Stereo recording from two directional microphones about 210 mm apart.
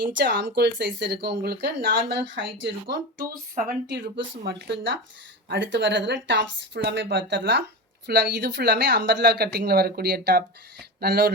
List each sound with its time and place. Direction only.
0.3 s a woman's voice: 55° right (ahead or behind)
2.1 s speech: 60° right (ahead or behind)
3.2 s speech: 40° right (ahead or behind)
4.4 s a woman's voice: 55° right (ahead or behind)